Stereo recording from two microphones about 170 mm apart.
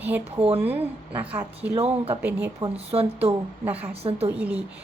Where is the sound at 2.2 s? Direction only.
10° right (ahead or behind).